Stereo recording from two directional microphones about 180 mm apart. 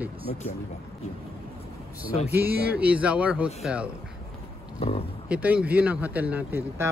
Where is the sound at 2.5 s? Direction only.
60° right (ahead or behind).